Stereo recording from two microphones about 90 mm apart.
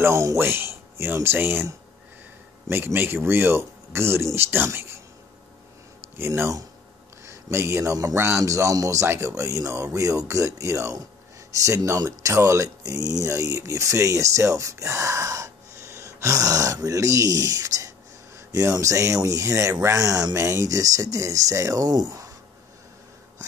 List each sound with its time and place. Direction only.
0.0 s speech: 30° right (ahead or behind)
6.1 s speech: 25° right (ahead or behind); by 22.3 s 45° right (ahead or behind)